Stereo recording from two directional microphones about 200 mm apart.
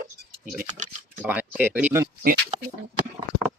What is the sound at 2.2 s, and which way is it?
Speech, 40° right (ahead or behind).